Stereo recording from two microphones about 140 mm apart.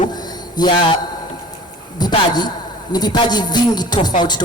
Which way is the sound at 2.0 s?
30° left (ahead or behind).